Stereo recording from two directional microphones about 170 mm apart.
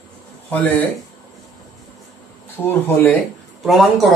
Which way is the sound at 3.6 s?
Centre (ahead or behind).